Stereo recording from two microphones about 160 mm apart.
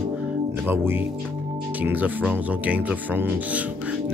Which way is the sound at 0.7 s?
15° right (ahead or behind).